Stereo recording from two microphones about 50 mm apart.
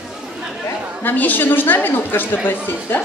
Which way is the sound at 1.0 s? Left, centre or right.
Left.